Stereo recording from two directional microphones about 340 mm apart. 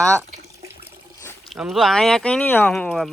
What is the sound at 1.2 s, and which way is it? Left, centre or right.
Speech, centre.